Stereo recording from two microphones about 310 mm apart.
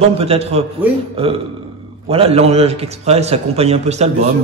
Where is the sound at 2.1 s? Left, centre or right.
Centre.